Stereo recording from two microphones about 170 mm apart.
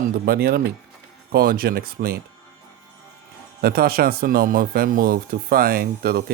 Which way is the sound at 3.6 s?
65° right (ahead or behind).